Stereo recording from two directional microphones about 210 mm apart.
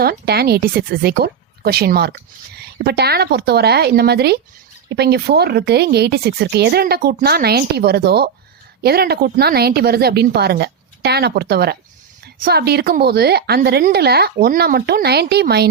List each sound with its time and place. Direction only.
0.0 s a woman's voice: 50° right (ahead or behind)